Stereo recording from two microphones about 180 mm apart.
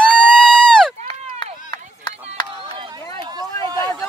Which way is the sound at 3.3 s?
20° right (ahead or behind).